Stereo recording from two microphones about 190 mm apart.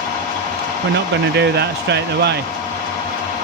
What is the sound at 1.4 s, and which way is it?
Speech, 60° right (ahead or behind).